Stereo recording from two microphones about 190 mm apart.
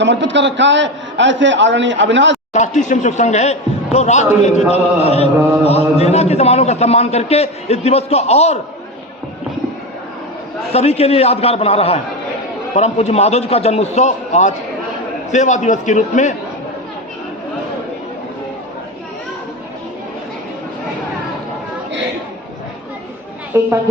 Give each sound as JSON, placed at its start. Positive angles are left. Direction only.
{"t": 0.0, "sound": "a man's voice", "side_deg": -70}
{"t": 2.5, "sound": "a man's voice", "side_deg": 40}
{"t": 10.7, "sound": "a man's voice", "side_deg": 35}
{"t": 23.5, "sound": "speech", "side_deg": -10}